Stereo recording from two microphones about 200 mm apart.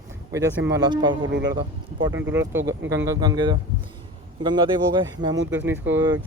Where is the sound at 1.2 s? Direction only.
65° right (ahead or behind).